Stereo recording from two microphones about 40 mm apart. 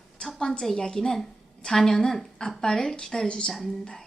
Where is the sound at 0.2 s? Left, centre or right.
Left.